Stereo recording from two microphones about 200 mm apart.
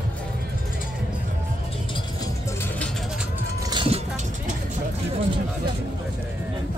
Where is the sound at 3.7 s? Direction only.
25° right (ahead or behind).